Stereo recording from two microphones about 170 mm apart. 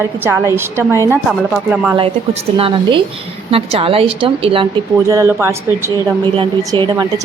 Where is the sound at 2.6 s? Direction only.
30° right (ahead or behind).